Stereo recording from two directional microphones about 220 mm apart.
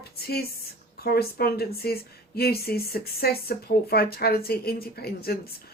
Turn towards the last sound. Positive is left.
turn(degrees=45)  # may be behind; listen again after turning